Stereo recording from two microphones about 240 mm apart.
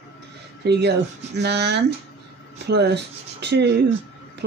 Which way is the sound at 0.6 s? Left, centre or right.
Right.